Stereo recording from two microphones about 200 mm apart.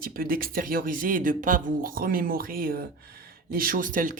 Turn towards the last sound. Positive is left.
turn(degrees=-40)  # may be behind; listen again after turning